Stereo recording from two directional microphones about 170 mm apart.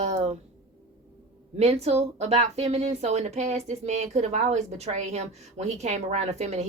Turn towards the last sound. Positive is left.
turn(degrees=-40)  # may be behind; listen again after turning